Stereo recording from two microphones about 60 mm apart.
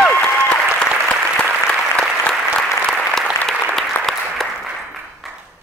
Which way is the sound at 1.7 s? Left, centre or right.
Centre.